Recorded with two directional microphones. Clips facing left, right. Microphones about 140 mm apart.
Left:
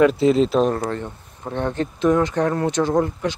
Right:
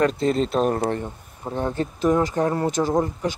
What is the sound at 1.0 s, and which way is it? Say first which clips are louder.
Speech: even; 10° right (ahead or behind).